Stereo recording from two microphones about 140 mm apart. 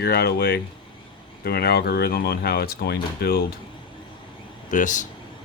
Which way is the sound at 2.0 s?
90° left.